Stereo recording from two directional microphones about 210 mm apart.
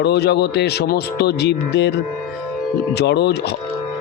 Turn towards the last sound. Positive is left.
turn(degrees=50)  # may be behind; listen again after turning